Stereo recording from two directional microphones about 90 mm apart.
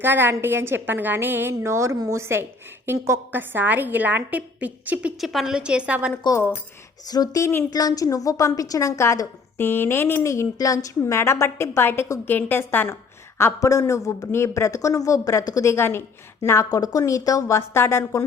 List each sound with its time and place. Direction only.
0.0 s a woman's voice: 25° right (ahead or behind)
5.1 s a woman's voice: centre (ahead or behind)
7.0 s a woman's voice: 45° left (ahead or behind)
9.6 s a woman's voice: 25° left (ahead or behind)
13.4 s a woman's voice: 40° left (ahead or behind)
16.6 s a woman's voice: 40° left (ahead or behind)